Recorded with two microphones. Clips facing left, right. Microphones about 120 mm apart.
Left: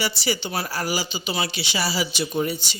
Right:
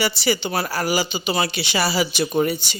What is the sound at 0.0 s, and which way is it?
Speech, 65° right (ahead or behind).